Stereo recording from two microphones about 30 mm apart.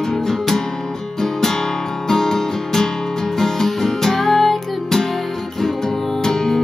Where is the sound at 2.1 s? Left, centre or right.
Centre.